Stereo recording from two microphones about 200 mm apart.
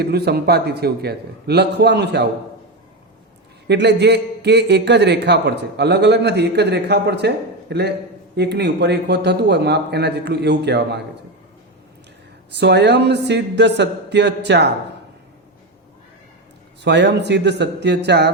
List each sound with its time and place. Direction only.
0.0 s a man's voice: 55° right (ahead or behind)
3.7 s a man's voice: 60° right (ahead or behind)
12.5 s a man's voice: 55° right (ahead or behind)
16.8 s a man's voice: 60° right (ahead or behind)